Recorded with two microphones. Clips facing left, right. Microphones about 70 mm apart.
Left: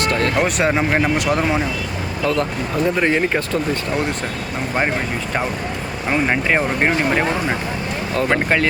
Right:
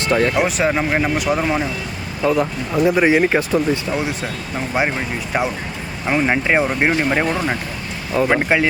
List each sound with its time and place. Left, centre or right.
0.0 s speech: centre
0.3 s speech: centre
6.1 s speech: centre